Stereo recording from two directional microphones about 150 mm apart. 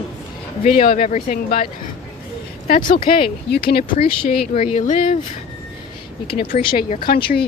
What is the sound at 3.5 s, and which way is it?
Speech, 90° left.